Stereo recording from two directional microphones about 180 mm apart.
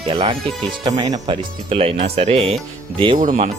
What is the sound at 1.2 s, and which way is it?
Speech, 30° right (ahead or behind).